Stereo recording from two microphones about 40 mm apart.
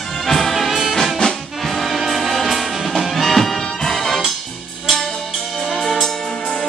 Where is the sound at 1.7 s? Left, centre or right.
Centre.